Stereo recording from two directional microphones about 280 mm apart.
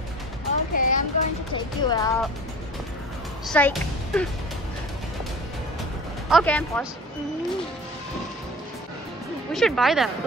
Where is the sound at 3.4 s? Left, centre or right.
Centre.